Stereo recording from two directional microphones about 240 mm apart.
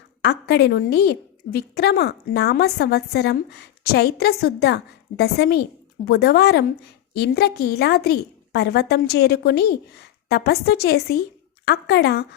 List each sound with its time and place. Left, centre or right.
0.2 s a woman's voice: left